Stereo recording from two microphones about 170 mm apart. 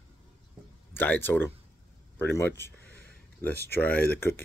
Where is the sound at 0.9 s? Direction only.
10° left (ahead or behind).